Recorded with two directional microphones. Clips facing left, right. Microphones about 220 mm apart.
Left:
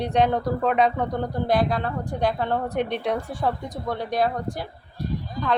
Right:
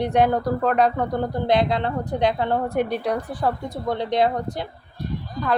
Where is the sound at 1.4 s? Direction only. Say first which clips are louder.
Right 2 dB; 20° right (ahead or behind).